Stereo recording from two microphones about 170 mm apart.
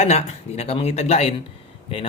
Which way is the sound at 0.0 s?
40° left (ahead or behind).